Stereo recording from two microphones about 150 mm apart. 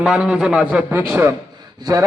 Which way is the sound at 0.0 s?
5° right (ahead or behind).